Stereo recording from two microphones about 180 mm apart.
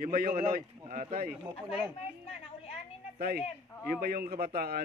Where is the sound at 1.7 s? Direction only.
5° right (ahead or behind).